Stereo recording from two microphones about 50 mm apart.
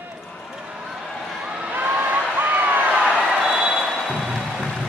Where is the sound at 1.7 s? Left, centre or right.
Right.